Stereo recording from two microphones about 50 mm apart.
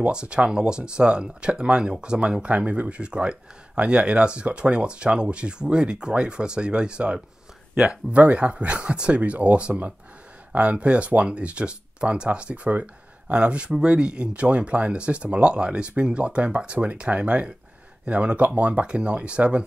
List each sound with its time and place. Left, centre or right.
0.0 s speech: centre